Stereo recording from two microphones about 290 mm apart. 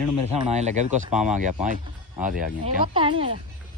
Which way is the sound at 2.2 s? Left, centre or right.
Right.